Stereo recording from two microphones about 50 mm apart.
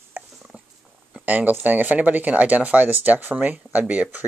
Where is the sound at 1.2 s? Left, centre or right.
Right.